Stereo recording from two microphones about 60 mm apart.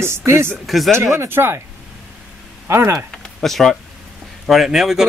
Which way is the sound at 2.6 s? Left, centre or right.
Right.